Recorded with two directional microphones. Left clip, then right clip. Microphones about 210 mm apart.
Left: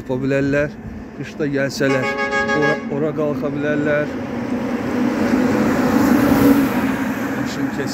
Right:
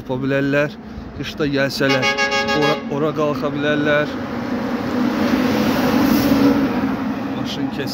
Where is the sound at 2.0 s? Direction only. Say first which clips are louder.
Right 1 dB; 15° right (ahead or behind).